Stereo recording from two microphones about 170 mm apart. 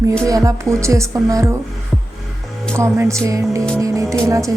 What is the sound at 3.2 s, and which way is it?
Speech, 20° right (ahead or behind).